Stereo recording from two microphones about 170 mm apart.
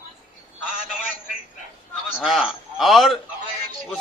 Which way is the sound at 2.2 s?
5° right (ahead or behind).